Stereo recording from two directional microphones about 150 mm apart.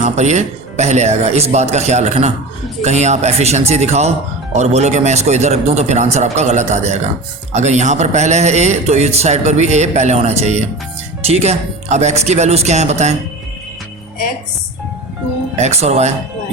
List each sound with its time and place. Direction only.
0.0 s speech: 50° right (ahead or behind)
15.5 s speech: 45° right (ahead or behind)